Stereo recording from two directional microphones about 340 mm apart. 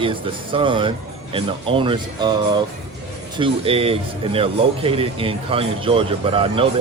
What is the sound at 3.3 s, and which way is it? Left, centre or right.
Speech, centre.